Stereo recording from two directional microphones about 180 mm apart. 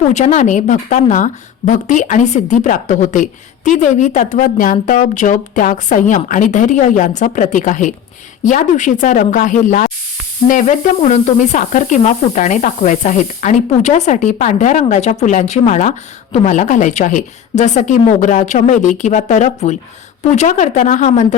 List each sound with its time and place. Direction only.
0.1 s speech: 40° left (ahead or behind)